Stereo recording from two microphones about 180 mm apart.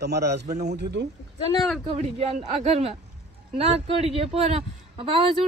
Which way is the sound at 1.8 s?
30° right (ahead or behind).